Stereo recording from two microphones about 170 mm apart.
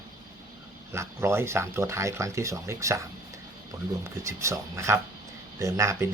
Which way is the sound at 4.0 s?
15° right (ahead or behind).